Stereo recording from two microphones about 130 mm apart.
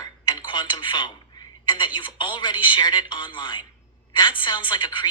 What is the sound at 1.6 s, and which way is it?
A woman's voice, 35° left (ahead or behind).